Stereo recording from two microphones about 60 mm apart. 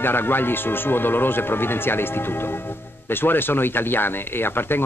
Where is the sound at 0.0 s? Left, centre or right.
Left.